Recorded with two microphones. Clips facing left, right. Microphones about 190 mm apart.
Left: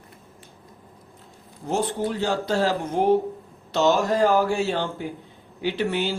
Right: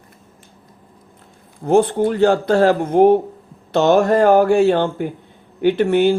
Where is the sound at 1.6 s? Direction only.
55° right (ahead or behind).